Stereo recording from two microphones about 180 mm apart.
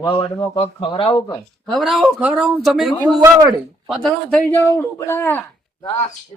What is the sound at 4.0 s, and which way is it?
Speech, 5° left (ahead or behind).